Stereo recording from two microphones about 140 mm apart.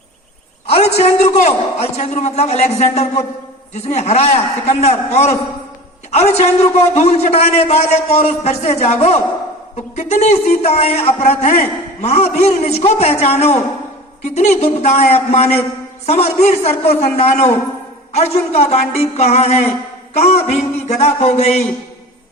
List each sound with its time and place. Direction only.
0.7 s a man's voice: 50° left (ahead or behind)